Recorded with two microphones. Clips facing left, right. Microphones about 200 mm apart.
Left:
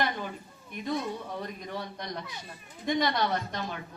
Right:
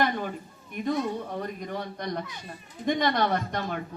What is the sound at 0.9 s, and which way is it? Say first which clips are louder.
A woman's voice: right 4 dB; 50° right (ahead or behind).